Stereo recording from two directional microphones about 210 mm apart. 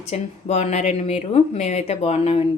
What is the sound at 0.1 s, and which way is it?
Speech, 30° left (ahead or behind).